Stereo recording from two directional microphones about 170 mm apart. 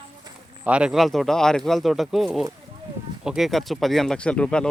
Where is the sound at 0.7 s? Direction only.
5° right (ahead or behind).